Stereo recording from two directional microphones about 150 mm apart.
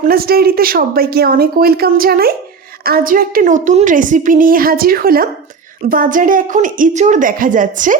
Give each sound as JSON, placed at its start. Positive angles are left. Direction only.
{"t": 0.0, "sound": "speech", "side_deg": -85}
{"t": 2.8, "sound": "a woman's voice", "side_deg": -80}
{"t": 5.9, "sound": "a woman's voice", "side_deg": -65}